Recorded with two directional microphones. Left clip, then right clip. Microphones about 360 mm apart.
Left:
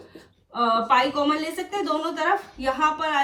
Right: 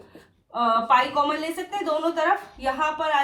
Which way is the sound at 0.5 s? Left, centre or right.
Centre.